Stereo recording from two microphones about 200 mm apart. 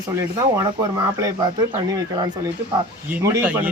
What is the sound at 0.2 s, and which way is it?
Speech, 15° right (ahead or behind).